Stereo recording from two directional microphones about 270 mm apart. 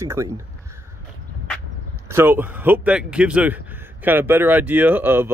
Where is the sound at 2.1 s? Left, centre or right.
Centre.